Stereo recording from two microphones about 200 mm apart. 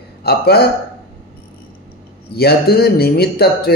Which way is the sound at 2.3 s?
50° left (ahead or behind).